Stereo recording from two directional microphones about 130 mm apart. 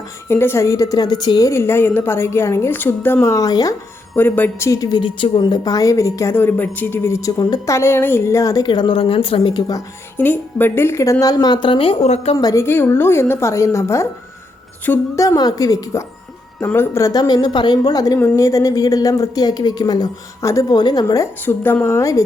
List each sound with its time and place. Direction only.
0.3 s a woman's voice: 20° left (ahead or behind)
4.2 s a woman's voice: 15° left (ahead or behind)
4.7 s a woman's voice: 30° left (ahead or behind)
10.2 s speech: 15° left (ahead or behind); by 12.4 s 55° left (ahead or behind)
12.4 s a woman's voice: 30° left (ahead or behind)
12.6 s a woman's voice: 15° left (ahead or behind)
21.4 s a woman's voice: 15° left (ahead or behind)